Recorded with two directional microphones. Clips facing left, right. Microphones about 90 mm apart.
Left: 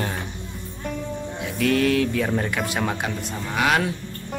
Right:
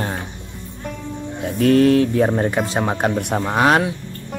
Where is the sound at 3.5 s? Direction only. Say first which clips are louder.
Right 5 dB; 35° right (ahead or behind).